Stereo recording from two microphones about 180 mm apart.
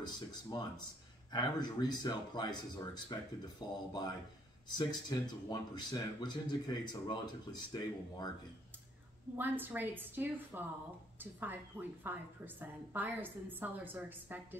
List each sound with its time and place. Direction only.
0.0 s speech: 20° left (ahead or behind)
9.4 s a woman's voice: 10° right (ahead or behind)